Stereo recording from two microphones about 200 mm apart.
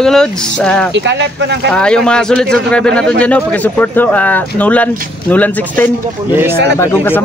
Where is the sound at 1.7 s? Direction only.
5° left (ahead or behind).